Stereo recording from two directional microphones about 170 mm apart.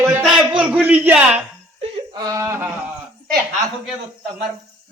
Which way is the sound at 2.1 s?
20° right (ahead or behind).